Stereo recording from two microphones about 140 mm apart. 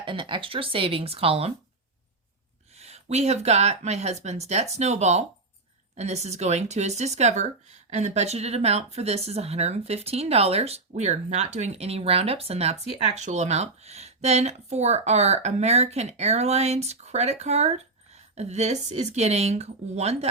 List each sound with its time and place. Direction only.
0.0 s speech: 35° right (ahead or behind)
2.7 s speech: 50° right (ahead or behind)
13.0 s speech: 55° right (ahead or behind)